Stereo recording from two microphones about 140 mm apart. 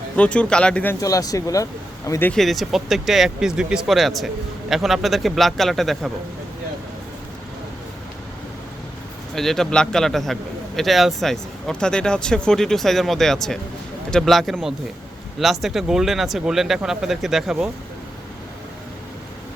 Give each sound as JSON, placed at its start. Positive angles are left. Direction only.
{"t": 0.2, "sound": "speech", "side_deg": 10}
{"t": 1.0, "sound": "speech", "side_deg": 25}
{"t": 2.3, "sound": "speech", "side_deg": 0}
{"t": 9.3, "sound": "speech", "side_deg": 0}